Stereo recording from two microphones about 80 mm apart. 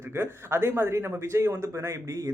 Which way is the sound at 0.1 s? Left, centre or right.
Right.